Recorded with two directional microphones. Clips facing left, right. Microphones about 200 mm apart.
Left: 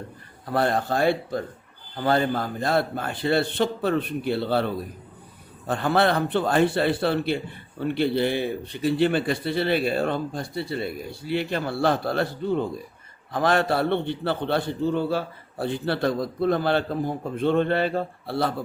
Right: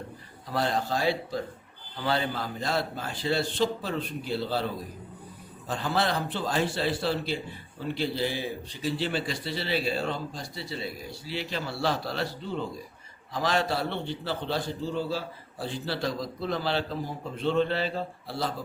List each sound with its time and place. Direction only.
0.4 s a man's voice: 55° left (ahead or behind)